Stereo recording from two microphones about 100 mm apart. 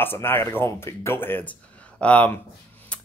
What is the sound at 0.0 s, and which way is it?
A man's voice, 20° left (ahead or behind).